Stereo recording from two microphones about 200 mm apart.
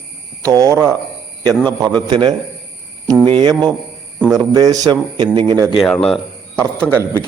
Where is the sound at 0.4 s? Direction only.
15° right (ahead or behind).